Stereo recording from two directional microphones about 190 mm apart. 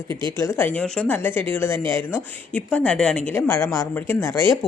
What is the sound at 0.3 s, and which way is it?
Speech, 15° left (ahead or behind).